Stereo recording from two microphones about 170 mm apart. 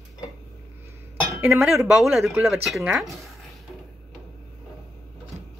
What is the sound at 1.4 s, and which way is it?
Speech, 15° right (ahead or behind).